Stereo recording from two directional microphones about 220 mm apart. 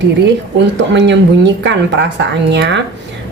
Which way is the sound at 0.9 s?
55° right (ahead or behind).